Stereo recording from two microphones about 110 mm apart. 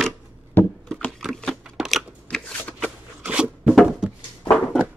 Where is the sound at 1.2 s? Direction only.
5° left (ahead or behind).